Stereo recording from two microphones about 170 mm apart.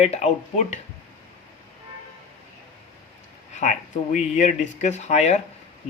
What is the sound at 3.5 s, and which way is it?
Speech, 45° left (ahead or behind).